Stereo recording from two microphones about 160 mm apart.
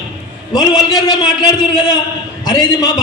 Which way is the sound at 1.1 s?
25° left (ahead or behind).